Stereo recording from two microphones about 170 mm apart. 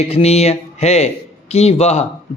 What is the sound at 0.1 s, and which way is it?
A man's voice, 40° left (ahead or behind).